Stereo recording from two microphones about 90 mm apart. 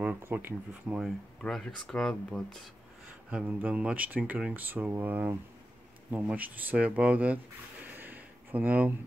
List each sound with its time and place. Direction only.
0.0 s speech: 20° right (ahead or behind)
1.4 s speech: 5° left (ahead or behind)
3.1 s speech: 15° right (ahead or behind)
7.8 s a sound: 20° right (ahead or behind)